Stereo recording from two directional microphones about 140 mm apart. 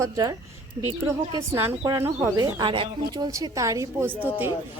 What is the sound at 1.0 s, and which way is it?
A woman's voice, 20° right (ahead or behind).